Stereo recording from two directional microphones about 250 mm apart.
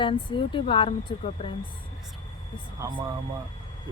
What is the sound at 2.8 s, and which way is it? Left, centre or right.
Speech, centre.